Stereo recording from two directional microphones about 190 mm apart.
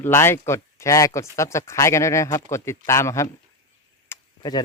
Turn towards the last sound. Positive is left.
turn(degrees=20)  # may be behind; listen again after turning